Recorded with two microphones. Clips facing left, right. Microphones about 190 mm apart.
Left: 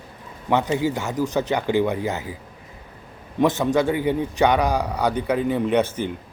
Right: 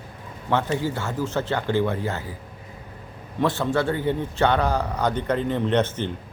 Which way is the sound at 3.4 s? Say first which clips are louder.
Left 3 dB; 20° left (ahead or behind).